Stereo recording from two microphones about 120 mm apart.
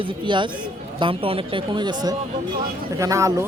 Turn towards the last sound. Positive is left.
turn(degrees=-25)  # may be behind; listen again after turning